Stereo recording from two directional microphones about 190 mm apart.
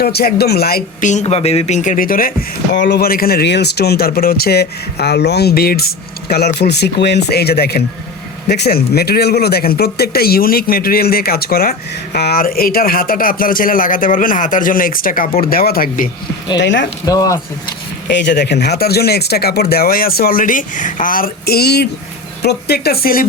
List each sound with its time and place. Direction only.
0.0 s speech: 55° left (ahead or behind)
1.1 s speech: 35° left (ahead or behind); by 2.3 s 50° left (ahead or behind)
2.7 s speech: 65° left (ahead or behind)
16.6 s speech: 70° left (ahead or behind)
17.1 s speech: 20° left (ahead or behind)
18.1 s speech: 65° left (ahead or behind)